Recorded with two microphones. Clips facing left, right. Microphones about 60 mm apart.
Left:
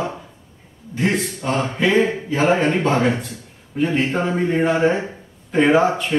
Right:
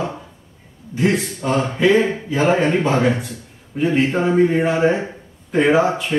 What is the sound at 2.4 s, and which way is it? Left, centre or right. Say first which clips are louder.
Speech: right 1 dB; centre.